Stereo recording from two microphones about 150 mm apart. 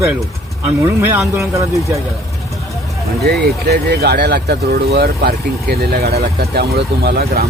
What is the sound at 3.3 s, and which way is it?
Speech, 90° right.